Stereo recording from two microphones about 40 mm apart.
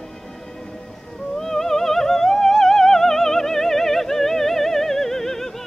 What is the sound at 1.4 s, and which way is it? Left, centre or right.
Music, centre.